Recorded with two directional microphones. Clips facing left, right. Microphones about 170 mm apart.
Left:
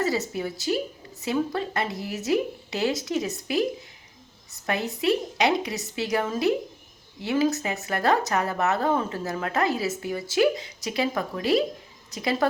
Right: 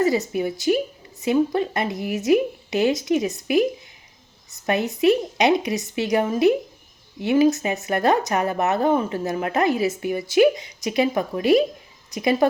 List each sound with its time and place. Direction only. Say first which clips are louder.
0.0 s a woman's voice: right 6 dB; 15° right (ahead or behind)